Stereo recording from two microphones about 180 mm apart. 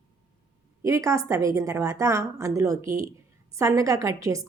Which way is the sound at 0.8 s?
15° right (ahead or behind).